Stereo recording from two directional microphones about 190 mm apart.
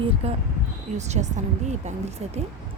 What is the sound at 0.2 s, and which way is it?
A woman's voice, 30° right (ahead or behind).